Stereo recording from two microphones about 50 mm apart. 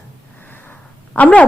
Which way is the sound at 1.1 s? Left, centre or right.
Left.